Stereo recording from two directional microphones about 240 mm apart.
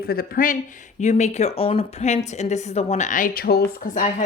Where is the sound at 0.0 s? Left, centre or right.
Left.